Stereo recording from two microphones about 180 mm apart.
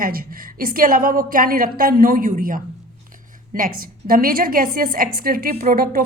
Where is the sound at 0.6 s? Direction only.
50° right (ahead or behind).